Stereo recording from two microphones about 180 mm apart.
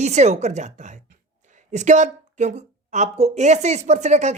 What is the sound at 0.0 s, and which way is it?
A woman's voice, 40° right (ahead or behind).